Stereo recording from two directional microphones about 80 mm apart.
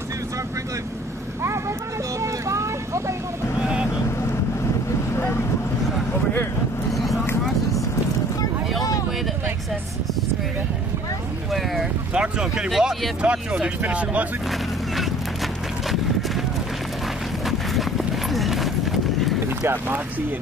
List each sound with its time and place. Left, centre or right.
2.2 s vehicle: right
11.5 s vehicle: centre
12.1 s a sound: centre
13.2 s speech: centre
15.9 s clip-clop: centre
17.5 s clip-clop: centre